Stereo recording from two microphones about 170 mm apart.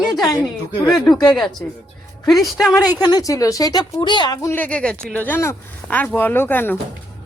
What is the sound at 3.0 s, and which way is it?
A woman's voice, 25° left (ahead or behind).